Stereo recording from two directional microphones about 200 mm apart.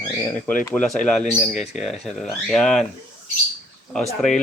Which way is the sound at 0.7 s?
5° left (ahead or behind).